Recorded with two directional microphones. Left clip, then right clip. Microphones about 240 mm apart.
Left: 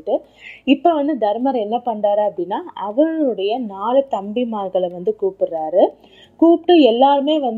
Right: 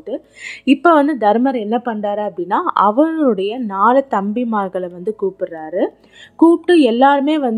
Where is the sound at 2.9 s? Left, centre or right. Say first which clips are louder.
Right 2 dB; right.